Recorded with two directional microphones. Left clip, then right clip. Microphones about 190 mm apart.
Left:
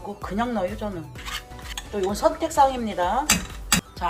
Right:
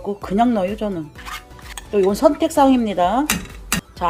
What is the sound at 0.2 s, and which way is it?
Speech, 50° right (ahead or behind).